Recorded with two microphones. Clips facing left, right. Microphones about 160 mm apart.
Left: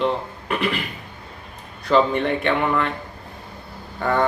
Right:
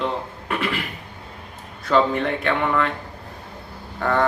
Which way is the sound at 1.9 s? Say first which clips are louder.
Left 1 dB; centre (ahead or behind).